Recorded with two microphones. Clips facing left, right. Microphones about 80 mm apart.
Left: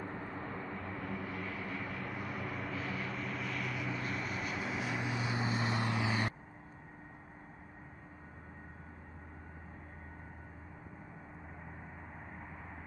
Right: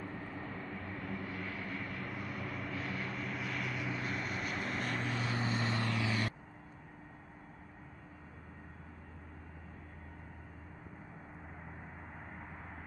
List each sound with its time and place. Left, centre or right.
0.0 s vehicle: left
0.4 s vehicle: centre; by 6.3 s left